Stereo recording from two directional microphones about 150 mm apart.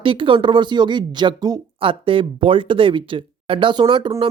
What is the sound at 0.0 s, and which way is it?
Speech, 35° right (ahead or behind).